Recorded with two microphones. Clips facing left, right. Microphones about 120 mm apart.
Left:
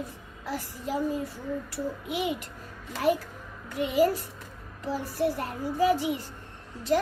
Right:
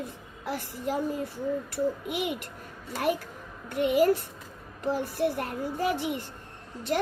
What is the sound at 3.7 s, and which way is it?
A child's voice, 60° right (ahead or behind).